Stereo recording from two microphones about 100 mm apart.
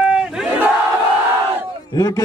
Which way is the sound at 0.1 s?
5° right (ahead or behind).